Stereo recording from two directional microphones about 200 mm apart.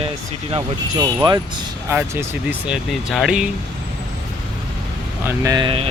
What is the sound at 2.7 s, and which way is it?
Speech, centre (ahead or behind).